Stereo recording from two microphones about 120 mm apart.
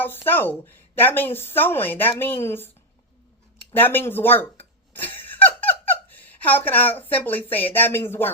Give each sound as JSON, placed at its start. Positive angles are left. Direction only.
{"t": 0.0, "sound": "a woman's voice", "side_deg": 15}
{"t": 3.8, "sound": "a woman's voice", "side_deg": 15}